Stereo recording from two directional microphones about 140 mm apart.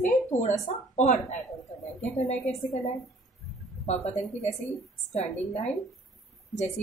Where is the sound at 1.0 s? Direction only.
55° left (ahead or behind).